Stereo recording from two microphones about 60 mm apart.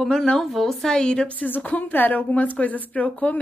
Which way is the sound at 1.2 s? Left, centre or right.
Left.